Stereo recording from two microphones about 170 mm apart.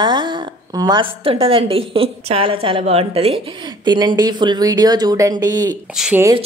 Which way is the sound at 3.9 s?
25° right (ahead or behind).